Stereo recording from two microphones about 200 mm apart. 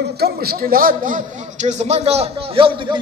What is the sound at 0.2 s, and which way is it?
A man's voice, 50° right (ahead or behind).